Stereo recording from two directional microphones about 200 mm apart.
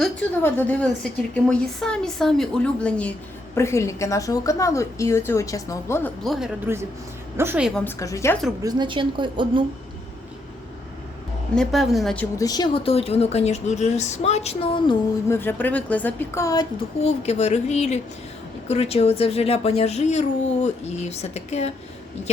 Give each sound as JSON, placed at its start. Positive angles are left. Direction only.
{"t": 0.0, "sound": "a woman's voice", "side_deg": 10}
{"t": 6.2, "sound": "a woman's voice", "side_deg": 0}
{"t": 7.8, "sound": "a woman's voice", "side_deg": 10}
{"t": 8.6, "sound": "a woman's voice", "side_deg": -25}
{"t": 11.5, "sound": "a woman's voice", "side_deg": 0}
{"t": 12.4, "sound": "a child's voice", "side_deg": 20}
{"t": 15.3, "sound": "a woman's voice", "side_deg": 10}
{"t": 17.0, "sound": "a child's voice", "side_deg": 35}